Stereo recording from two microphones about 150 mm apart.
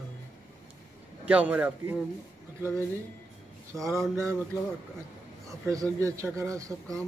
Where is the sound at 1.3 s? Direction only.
10° right (ahead or behind).